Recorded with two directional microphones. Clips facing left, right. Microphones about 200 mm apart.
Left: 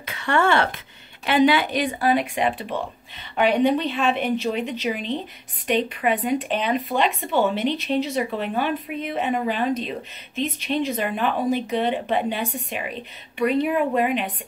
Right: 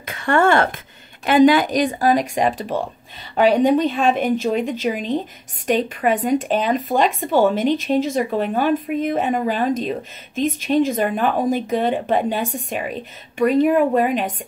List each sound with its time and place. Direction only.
0.0 s speech: 50° right (ahead or behind)